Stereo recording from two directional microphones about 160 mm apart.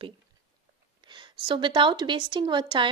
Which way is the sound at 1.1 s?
30° right (ahead or behind).